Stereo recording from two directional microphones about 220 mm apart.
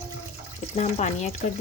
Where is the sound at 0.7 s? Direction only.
30° left (ahead or behind).